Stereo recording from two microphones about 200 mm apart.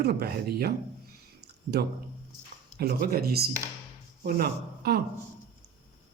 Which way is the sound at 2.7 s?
50° right (ahead or behind).